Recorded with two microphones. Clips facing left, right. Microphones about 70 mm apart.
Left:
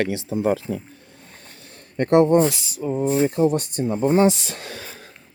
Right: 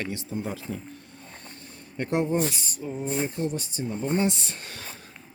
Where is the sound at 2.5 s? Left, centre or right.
Left.